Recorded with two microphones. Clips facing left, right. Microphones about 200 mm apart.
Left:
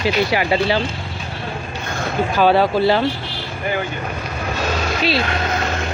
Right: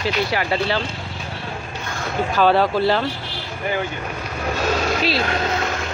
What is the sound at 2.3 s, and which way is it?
Speech, 5° left (ahead or behind).